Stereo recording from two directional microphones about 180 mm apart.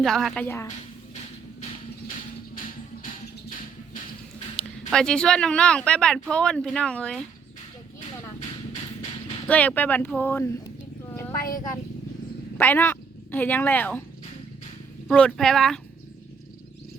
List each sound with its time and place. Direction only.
0.0 s speech: centre (ahead or behind)
0.4 s speech: 15° left (ahead or behind)
4.9 s speech: 5° left (ahead or behind)
9.5 s speech: 10° left (ahead or behind)
11.1 s a sound: 15° left (ahead or behind)
12.5 s a woman's voice: 10° left (ahead or behind)
15.0 s speech: 5° left (ahead or behind)